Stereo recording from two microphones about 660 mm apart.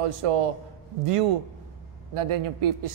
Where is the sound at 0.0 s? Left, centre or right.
Right.